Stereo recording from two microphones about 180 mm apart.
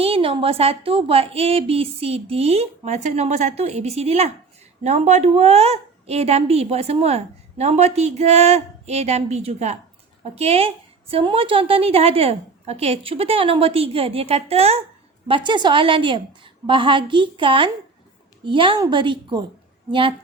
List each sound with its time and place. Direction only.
0.0 s a woman's voice: 30° right (ahead or behind)